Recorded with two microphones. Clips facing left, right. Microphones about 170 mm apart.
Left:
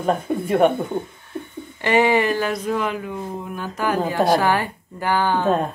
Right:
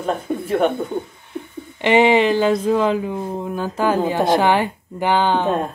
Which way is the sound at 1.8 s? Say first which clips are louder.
Right 3 dB; 20° right (ahead or behind).